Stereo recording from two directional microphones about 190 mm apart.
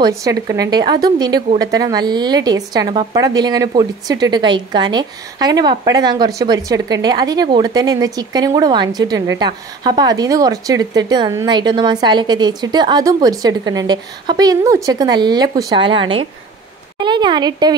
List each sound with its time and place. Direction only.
0.2 s a woman's voice: 20° right (ahead or behind)